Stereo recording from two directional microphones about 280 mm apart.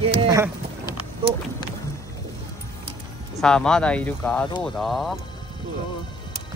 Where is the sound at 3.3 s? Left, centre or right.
Centre.